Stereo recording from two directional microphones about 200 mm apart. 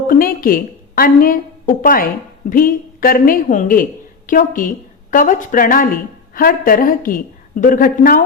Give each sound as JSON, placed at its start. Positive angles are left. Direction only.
{"t": 0.1, "sound": "a woman's voice", "side_deg": 45}